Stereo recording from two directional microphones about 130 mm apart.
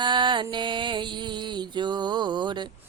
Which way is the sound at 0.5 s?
40° right (ahead or behind).